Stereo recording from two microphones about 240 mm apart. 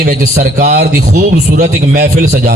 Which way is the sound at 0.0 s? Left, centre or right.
Right.